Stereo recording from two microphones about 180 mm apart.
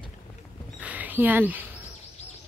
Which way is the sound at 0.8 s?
10° right (ahead or behind).